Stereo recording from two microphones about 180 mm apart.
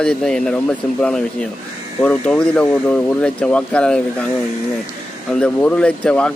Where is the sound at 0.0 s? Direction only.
5° left (ahead or behind).